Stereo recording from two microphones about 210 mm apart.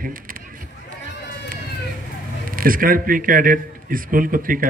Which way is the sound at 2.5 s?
40° right (ahead or behind).